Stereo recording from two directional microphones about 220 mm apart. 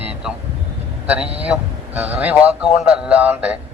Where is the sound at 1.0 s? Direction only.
5° right (ahead or behind).